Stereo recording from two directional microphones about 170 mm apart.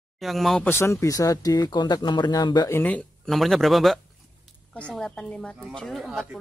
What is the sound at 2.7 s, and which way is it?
Speech, 10° left (ahead or behind).